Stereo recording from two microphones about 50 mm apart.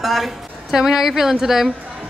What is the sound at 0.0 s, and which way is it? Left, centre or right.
A woman's voice, centre.